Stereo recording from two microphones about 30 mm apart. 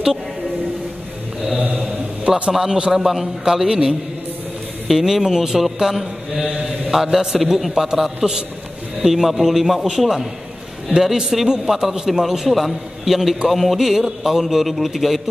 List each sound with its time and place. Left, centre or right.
2.2 s a man's voice: right
2.5 s a man's voice: centre
5.0 s a man's voice: centre